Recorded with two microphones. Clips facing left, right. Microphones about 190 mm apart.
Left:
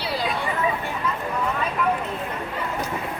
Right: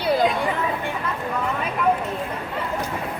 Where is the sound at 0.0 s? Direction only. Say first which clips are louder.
Right 8 dB; 50° right (ahead or behind).